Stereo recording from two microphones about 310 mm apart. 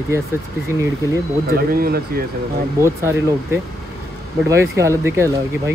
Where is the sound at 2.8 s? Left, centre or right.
Centre.